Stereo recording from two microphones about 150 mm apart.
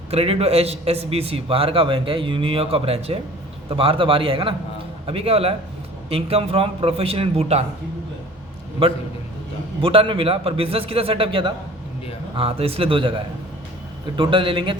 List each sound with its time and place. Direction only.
0.1 s a man's voice: 40° right (ahead or behind)
8.8 s a man's voice: 40° right (ahead or behind)